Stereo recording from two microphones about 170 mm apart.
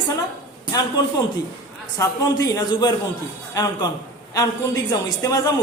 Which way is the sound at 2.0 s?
20° left (ahead or behind).